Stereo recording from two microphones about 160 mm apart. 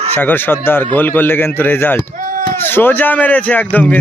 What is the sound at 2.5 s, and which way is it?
A man's voice, 15° left (ahead or behind).